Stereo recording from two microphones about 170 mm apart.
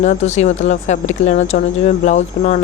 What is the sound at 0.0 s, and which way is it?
A woman's voice, 45° left (ahead or behind).